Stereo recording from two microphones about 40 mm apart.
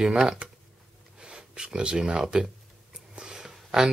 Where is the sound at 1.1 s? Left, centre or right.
Right.